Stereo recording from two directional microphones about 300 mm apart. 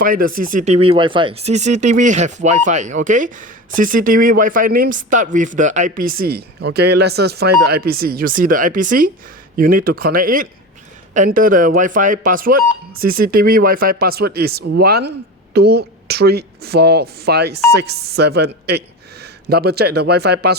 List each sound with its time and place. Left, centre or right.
0.0 s speech: right